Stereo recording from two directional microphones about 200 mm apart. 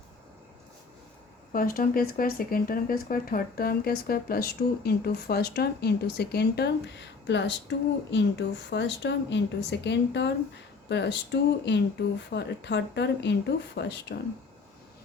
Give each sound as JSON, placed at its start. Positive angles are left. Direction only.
{"t": 1.5, "sound": "speech", "side_deg": 45}